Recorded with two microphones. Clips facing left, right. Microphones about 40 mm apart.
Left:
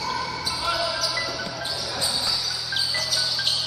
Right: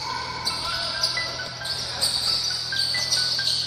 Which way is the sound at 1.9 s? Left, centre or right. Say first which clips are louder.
Even; left.